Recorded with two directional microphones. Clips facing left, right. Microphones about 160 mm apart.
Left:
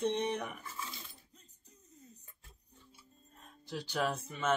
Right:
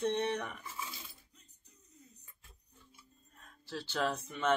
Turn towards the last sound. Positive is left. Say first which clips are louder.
# right 1 dB
turn(degrees=5)  # may be behind; listen again after turning